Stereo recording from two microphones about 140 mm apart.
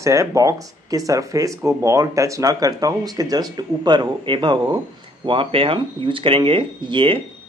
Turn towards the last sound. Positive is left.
turn(degrees=-40)  # may be behind; listen again after turning